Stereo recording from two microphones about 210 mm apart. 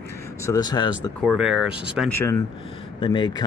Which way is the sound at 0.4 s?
15° left (ahead or behind).